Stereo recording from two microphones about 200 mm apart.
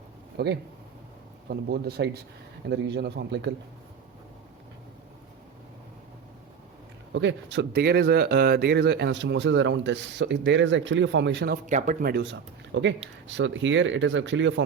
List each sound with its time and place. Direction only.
0.3 s speech: 55° right (ahead or behind)
7.1 s speech: 65° right (ahead or behind)
11.5 s speech: 40° right (ahead or behind); by 14.6 s 65° right (ahead or behind)